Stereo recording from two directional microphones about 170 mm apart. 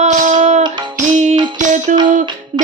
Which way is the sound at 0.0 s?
45° right (ahead or behind).